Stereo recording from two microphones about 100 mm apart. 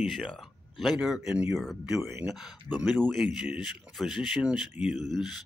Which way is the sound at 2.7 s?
20° right (ahead or behind).